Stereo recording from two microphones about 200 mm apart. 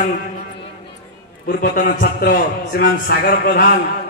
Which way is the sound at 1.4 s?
40° left (ahead or behind).